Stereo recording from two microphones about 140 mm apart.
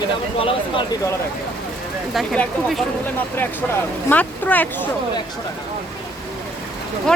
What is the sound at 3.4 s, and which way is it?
Speech, 15° left (ahead or behind).